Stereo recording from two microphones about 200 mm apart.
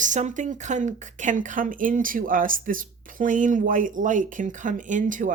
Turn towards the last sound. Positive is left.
turn(degrees=-40)  # may be behind; listen again after turning